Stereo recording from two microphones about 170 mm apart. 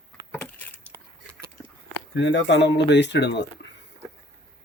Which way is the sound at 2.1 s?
90° left.